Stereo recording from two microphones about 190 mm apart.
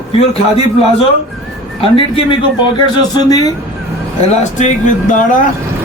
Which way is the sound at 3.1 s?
20° left (ahead or behind).